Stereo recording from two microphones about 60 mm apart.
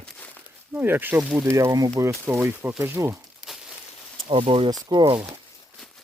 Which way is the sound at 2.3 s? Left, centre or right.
Right.